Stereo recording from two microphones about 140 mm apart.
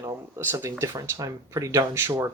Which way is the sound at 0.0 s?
20° right (ahead or behind).